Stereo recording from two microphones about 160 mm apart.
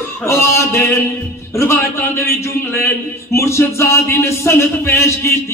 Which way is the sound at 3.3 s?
15° left (ahead or behind).